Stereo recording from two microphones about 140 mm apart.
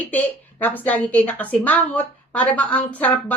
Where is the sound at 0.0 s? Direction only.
10° left (ahead or behind).